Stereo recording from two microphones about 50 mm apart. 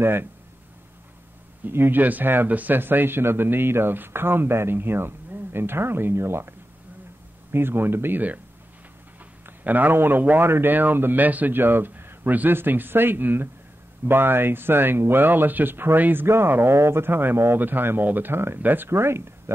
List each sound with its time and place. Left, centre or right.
0.0 s speech: right
1.7 s speech: right
2.0 s speech: right
7.5 s speech: right
9.5 s speech: right
16.7 s speech: right
18.3 s speech: right
18.6 s speech: right
18.9 s speech: right